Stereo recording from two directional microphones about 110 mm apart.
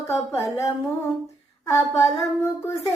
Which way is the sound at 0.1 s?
25° left (ahead or behind).